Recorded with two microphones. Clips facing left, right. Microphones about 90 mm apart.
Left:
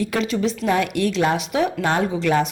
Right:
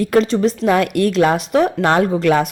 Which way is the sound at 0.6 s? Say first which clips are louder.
Right 4 dB; 55° right (ahead or behind).